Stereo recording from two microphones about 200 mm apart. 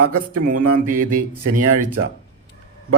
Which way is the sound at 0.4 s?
45° right (ahead or behind).